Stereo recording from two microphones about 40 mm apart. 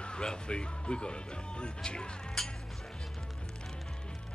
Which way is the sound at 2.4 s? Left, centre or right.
Centre.